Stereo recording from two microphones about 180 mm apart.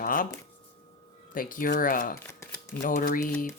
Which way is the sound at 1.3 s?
50° left (ahead or behind).